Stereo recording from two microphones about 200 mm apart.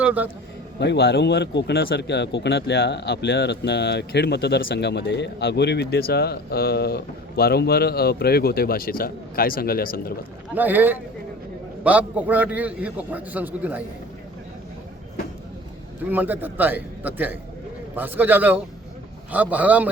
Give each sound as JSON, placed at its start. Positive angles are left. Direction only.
{"t": 0.0, "sound": "a man's voice", "side_deg": -5}
{"t": 0.8, "sound": "speech", "side_deg": 55}
{"t": 10.5, "sound": "a man's voice", "side_deg": -10}
{"t": 16.0, "sound": "a man's voice", "side_deg": -10}